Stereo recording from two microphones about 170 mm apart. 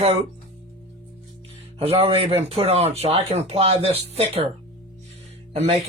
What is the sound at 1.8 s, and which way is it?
Speech, 35° right (ahead or behind).